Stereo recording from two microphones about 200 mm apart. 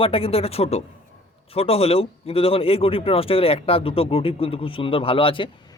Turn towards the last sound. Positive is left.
turn(degrees=25)  # may be behind; listen again after turning